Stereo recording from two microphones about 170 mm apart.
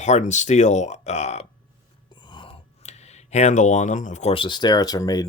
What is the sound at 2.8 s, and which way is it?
Speech, 40° left (ahead or behind).